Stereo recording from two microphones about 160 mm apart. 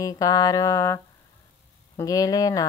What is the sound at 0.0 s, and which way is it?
Speech, 20° left (ahead or behind).